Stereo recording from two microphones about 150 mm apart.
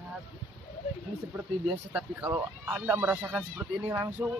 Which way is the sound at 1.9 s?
10° right (ahead or behind).